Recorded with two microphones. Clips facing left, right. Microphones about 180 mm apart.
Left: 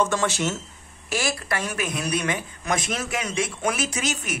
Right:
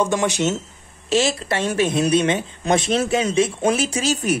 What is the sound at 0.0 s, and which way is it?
A woman's voice, 15° right (ahead or behind).